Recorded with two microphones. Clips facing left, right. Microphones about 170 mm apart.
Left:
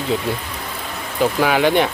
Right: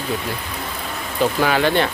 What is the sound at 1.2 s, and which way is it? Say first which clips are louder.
Speech: left 2 dB; 10° left (ahead or behind).